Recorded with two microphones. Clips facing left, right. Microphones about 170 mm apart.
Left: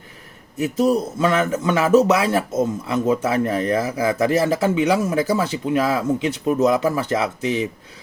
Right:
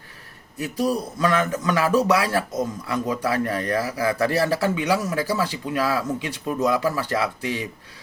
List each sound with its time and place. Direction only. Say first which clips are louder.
0.6 s a man's voice: left 5 dB; 25° left (ahead or behind)